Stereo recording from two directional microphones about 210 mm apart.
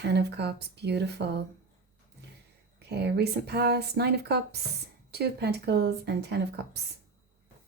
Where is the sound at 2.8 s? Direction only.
50° right (ahead or behind).